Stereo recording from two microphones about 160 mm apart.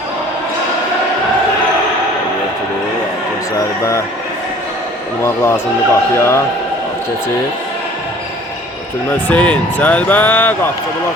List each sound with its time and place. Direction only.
5.2 s speech: 15° left (ahead or behind)
9.3 s speech: 10° left (ahead or behind)